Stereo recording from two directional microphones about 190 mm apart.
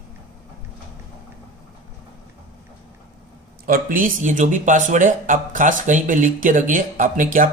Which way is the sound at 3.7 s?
45° right (ahead or behind).